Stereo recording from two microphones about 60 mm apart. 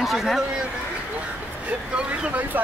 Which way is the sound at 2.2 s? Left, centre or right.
Centre.